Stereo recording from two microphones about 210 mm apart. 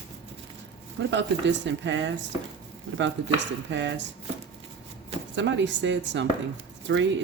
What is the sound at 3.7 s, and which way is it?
Speech, 60° right (ahead or behind).